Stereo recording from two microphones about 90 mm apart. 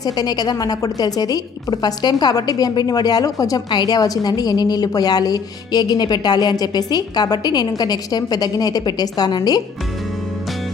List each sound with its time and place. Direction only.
0.0 s a woman's voice: 45° left (ahead or behind)